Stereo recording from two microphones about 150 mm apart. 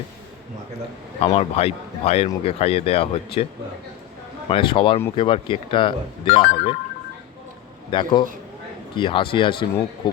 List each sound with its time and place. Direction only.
1.2 s speech: 45° left (ahead or behind)
7.9 s speech: 35° left (ahead or behind)